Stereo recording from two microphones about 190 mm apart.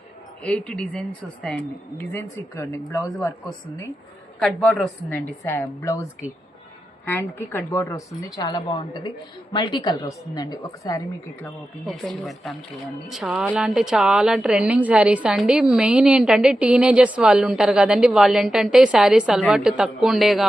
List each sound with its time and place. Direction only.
0.4 s speech: 5° left (ahead or behind)
4.4 s a woman's voice: 5° left (ahead or behind); by 11.0 s 20° left (ahead or behind)
11.4 s speech: centre (ahead or behind)